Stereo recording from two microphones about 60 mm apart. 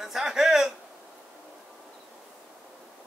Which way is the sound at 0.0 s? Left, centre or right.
Centre.